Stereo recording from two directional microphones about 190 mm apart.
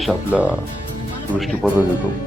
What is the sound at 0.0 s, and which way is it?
Speech, 5° right (ahead or behind).